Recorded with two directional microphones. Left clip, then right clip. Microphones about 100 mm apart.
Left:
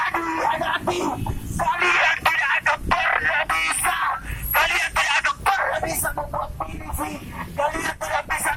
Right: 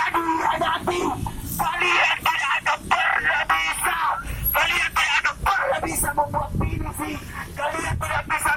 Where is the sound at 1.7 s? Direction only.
15° left (ahead or behind).